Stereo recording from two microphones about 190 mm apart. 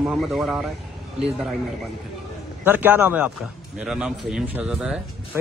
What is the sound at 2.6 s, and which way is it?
A man's voice, 10° right (ahead or behind).